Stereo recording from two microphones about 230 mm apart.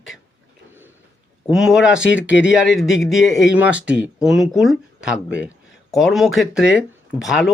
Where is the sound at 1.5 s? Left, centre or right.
Centre.